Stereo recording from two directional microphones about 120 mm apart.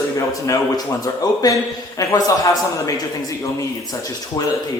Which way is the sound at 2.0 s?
30° left (ahead or behind).